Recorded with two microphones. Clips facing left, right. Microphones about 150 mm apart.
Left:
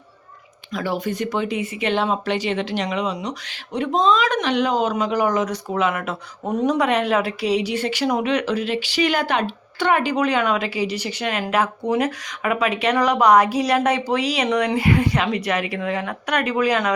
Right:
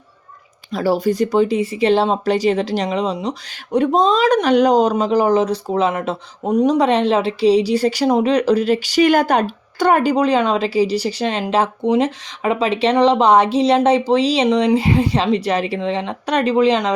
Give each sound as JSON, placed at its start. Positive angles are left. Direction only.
{"t": 0.7, "sound": "speech", "side_deg": -35}
{"t": 3.7, "sound": "speech", "side_deg": -40}
{"t": 6.7, "sound": "speech", "side_deg": -30}